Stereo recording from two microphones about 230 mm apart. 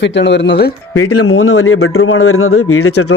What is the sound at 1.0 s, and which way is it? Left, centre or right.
A man's voice, left.